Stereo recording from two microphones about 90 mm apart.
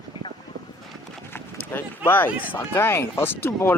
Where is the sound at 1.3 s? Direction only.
25° left (ahead or behind).